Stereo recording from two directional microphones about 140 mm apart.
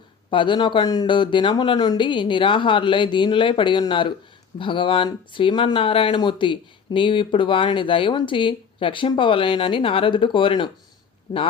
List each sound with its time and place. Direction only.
0.3 s speech: 35° left (ahead or behind)